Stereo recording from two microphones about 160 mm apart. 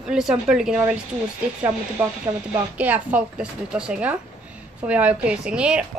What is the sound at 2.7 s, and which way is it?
A woman's voice, 10° right (ahead or behind).